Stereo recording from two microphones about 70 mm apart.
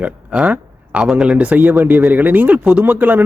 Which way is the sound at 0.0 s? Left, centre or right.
Right.